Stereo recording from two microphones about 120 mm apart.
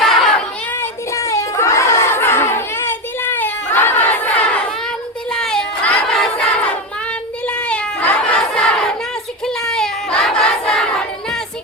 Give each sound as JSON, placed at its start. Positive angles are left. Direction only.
{"t": 0.0, "sound": "child singing", "side_deg": 0}
{"t": 0.8, "sound": "a sound", "side_deg": 25}
{"t": 9.5, "sound": "crowd", "side_deg": 5}